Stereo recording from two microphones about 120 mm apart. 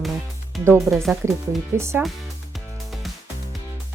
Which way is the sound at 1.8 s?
25° right (ahead or behind).